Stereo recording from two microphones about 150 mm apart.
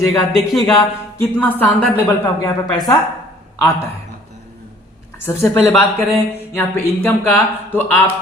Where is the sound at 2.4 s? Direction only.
25° left (ahead or behind).